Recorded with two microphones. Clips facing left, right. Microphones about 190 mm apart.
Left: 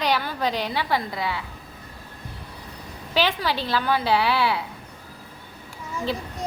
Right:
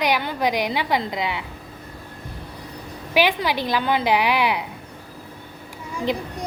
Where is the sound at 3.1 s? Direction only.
15° right (ahead or behind).